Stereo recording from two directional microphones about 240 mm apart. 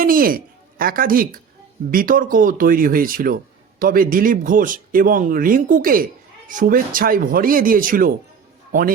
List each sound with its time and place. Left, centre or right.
0.0 s speech: right